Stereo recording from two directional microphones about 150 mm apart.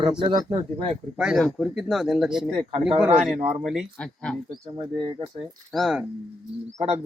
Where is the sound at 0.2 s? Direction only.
30° right (ahead or behind).